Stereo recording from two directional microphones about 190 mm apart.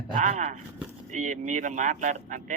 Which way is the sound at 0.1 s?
40° right (ahead or behind).